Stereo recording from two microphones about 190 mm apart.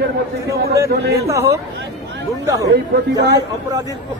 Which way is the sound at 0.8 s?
55° right (ahead or behind).